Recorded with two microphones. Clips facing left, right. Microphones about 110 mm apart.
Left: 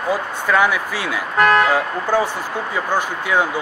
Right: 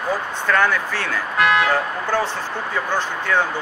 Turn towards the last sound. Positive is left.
turn(degrees=10)  # may be behind; listen again after turning